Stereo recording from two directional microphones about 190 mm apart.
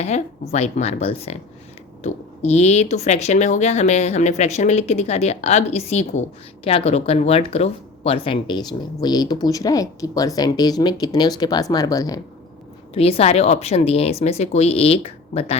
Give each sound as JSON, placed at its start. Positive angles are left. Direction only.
{"t": 0.0, "sound": "speech", "side_deg": 35}
{"t": 12.9, "sound": "speech", "side_deg": 30}